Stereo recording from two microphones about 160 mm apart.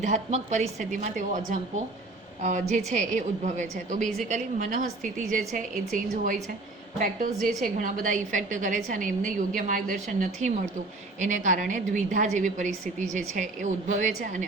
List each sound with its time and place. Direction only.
0.0 s a woman's voice: 45° right (ahead or behind)